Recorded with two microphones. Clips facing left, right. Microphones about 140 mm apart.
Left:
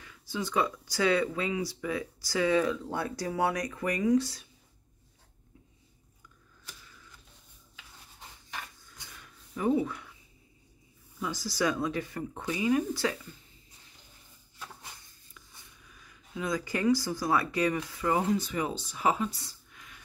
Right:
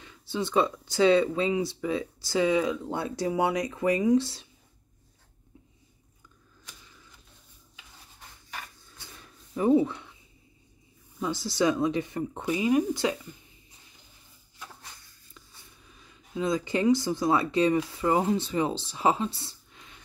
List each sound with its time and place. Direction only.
0.0 s speech: 25° right (ahead or behind)
9.1 s a sound: 30° right (ahead or behind)
11.1 s speech: 25° right (ahead or behind)
15.9 s speech: 25° right (ahead or behind)